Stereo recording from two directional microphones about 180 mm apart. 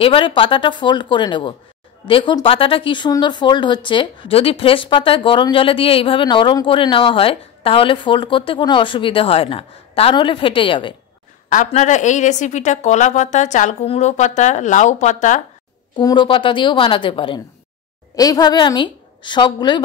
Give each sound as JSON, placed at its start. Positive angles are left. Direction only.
{"t": 0.0, "sound": "speech", "side_deg": 30}
{"t": 11.4, "sound": "a woman's voice", "side_deg": 45}
{"t": 16.0, "sound": "a woman's voice", "side_deg": 25}